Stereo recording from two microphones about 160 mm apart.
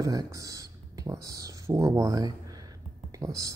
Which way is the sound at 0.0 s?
20° right (ahead or behind).